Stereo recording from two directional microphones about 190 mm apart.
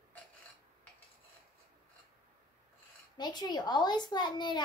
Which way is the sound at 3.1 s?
20° left (ahead or behind).